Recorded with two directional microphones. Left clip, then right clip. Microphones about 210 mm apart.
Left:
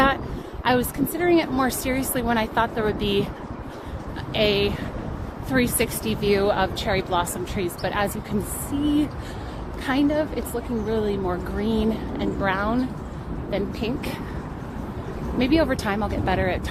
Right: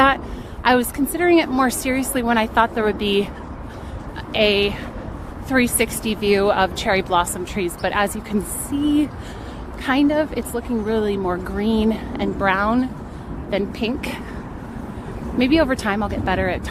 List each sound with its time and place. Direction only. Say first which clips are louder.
0.6 s a woman's voice: right 5 dB; 30° right (ahead or behind)
4.3 s a woman's voice: right 4 dB; 25° right (ahead or behind)
15.4 s a woman's voice: right 4 dB; 30° right (ahead or behind)